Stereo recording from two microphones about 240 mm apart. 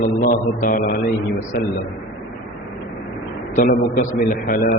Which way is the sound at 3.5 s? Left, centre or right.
Left.